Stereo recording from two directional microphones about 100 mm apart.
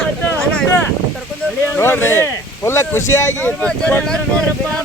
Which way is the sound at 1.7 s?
20° left (ahead or behind).